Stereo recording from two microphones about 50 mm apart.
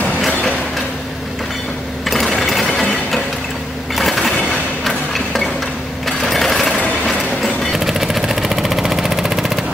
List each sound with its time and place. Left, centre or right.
2.0 s sewing machine: centre
3.9 s a sound: centre
6.0 s sewing machine: centre
7.1 s vehicle: centre